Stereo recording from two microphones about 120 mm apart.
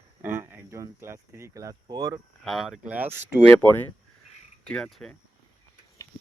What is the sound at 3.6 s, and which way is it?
Speech, 15° left (ahead or behind).